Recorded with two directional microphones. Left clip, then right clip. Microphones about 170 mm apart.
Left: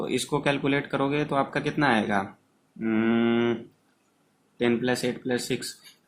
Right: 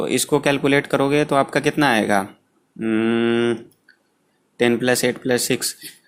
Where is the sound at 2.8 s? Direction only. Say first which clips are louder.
Right 5 dB; 25° right (ahead or behind).